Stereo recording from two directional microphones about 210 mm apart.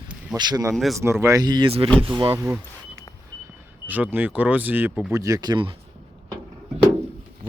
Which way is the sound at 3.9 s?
10° right (ahead or behind).